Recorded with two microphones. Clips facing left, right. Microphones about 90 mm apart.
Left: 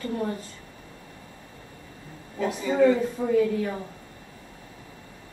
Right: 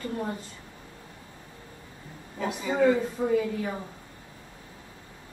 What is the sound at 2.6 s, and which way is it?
A woman's voice, 10° right (ahead or behind).